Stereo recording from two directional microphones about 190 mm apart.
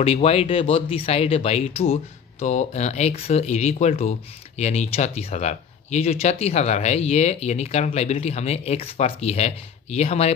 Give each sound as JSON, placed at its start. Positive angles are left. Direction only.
{"t": 0.0, "sound": "speech", "side_deg": 30}